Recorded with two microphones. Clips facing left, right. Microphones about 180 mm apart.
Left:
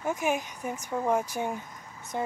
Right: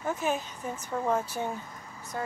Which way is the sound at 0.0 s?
15° left (ahead or behind).